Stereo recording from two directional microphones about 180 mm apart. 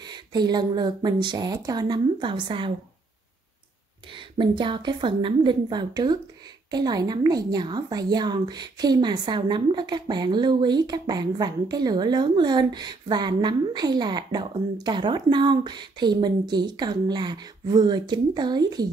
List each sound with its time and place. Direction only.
0.0 s a woman's voice: 25° right (ahead or behind)
4.1 s a woman's voice: 25° right (ahead or behind)